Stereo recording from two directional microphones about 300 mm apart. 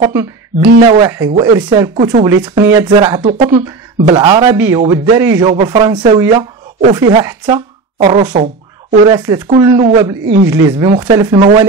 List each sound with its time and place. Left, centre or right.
0.8 s speech: centre
10.2 s speech: right
10.5 s speech: centre